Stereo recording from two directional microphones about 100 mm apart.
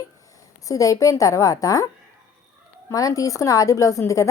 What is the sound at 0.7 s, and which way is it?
A woman's voice, 35° left (ahead or behind).